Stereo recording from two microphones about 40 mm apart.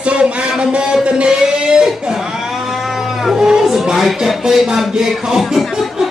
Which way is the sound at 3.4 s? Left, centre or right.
Centre.